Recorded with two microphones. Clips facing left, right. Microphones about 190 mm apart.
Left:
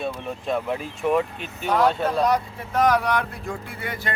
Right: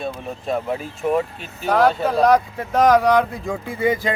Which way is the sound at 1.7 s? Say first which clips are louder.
Right 3 dB; 90° right.